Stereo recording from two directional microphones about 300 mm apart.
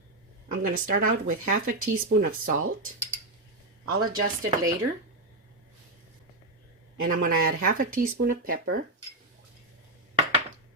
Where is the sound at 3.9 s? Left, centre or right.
Right.